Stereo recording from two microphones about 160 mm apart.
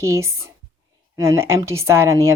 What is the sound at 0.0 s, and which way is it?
A woman's voice, 15° right (ahead or behind).